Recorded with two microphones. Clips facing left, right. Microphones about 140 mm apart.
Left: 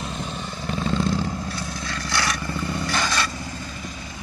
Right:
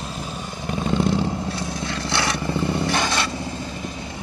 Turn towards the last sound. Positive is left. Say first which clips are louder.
# right 3 dB
turn(degrees=-20)  # may be behind; listen again after turning